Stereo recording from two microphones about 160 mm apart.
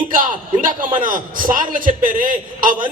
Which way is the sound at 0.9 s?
55° right (ahead or behind).